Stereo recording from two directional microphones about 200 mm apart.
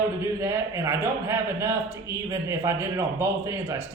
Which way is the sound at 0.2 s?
15° right (ahead or behind).